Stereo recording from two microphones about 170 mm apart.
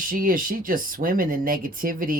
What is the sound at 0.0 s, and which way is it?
Speech, 55° right (ahead or behind).